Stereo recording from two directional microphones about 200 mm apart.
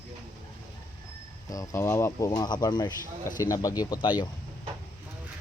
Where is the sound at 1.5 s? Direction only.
15° left (ahead or behind).